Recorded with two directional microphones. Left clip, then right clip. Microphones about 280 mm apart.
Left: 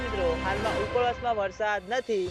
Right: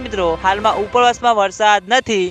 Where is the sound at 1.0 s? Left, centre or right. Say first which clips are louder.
Right 17 dB; right.